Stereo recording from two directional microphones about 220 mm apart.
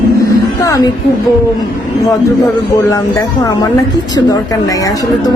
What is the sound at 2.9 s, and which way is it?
Speech, 15° left (ahead or behind).